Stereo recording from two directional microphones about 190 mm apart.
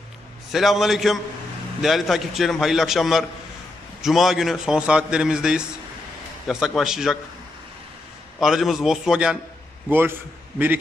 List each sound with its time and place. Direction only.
0.5 s a man's voice: centre (ahead or behind)
8.4 s a man's voice: centre (ahead or behind)